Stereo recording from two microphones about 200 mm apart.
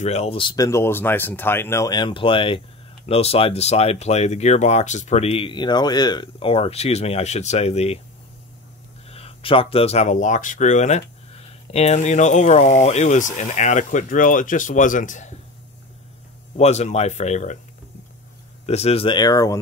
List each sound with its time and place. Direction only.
0.0 s speech: 30° left (ahead or behind)
9.1 s speech: 30° left (ahead or behind)
16.5 s speech: 35° left (ahead or behind)
18.7 s speech: 30° left (ahead or behind)